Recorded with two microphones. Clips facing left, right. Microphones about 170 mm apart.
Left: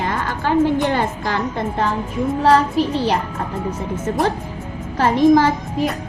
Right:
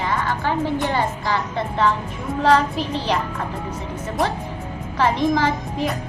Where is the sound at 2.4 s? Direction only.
40° left (ahead or behind).